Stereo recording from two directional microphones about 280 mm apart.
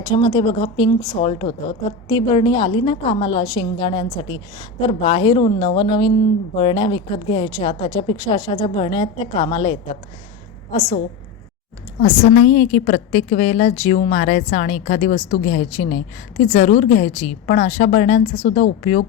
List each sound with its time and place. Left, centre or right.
0.0 s a woman's voice: centre
11.9 s a woman's voice: left